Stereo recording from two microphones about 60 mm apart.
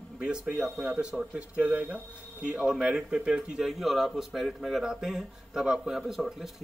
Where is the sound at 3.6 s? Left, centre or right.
Centre.